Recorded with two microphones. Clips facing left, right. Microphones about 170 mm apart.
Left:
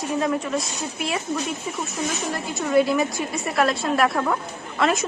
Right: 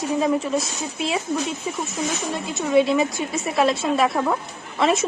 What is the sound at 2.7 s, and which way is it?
Speech, 25° right (ahead or behind).